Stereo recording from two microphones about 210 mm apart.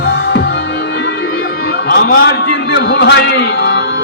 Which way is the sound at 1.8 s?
55° left (ahead or behind).